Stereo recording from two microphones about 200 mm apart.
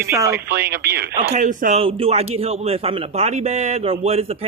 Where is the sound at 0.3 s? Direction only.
50° right (ahead or behind).